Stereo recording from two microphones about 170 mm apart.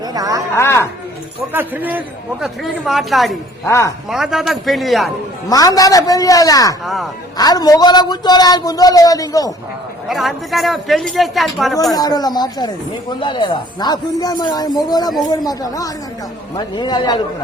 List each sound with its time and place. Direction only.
0.1 s a sound: 20° right (ahead or behind)
0.5 s speech: 15° left (ahead or behind)
1.5 s a man's voice: 10° right (ahead or behind)
3.7 s a man's voice: 15° left (ahead or behind)
4.1 s a man's voice: centre (ahead or behind)
5.5 s speech: 20° left (ahead or behind)
6.8 s a man's voice: centre (ahead or behind)
7.3 s speech: 25° left (ahead or behind)
10.1 s a man's voice: centre (ahead or behind)
11.9 s speech: 25° left (ahead or behind)